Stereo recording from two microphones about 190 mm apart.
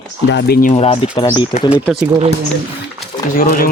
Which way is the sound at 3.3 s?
45° left (ahead or behind).